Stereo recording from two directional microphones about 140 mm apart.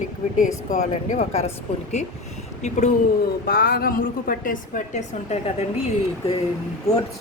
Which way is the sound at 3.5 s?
90° left.